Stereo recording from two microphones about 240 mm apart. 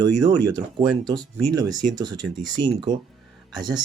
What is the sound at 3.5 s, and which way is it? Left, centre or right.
Speech, centre.